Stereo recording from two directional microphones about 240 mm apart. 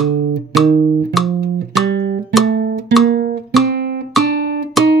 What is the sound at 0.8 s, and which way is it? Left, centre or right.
Music, right.